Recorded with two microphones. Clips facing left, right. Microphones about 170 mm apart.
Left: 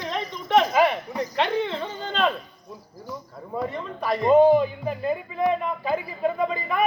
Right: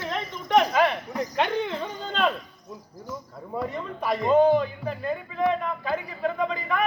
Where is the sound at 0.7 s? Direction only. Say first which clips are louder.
Left 2 dB; 5° left (ahead or behind).